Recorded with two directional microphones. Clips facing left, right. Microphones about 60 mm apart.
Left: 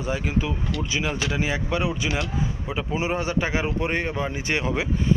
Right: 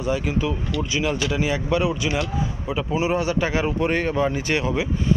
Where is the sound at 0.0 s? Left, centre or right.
Left.